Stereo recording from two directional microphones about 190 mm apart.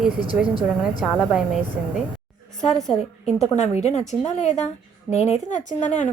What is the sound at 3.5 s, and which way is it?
Speech, 35° left (ahead or behind).